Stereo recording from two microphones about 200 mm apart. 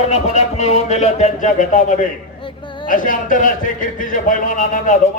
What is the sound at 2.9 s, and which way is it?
A man's voice, 40° left (ahead or behind).